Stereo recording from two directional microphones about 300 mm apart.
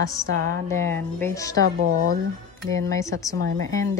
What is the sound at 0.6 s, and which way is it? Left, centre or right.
Speech, centre.